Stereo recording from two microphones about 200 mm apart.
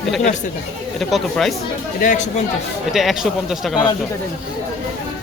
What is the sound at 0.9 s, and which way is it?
Speech, centre (ahead or behind).